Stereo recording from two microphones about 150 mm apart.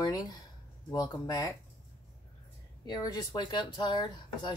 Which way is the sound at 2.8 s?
25° left (ahead or behind).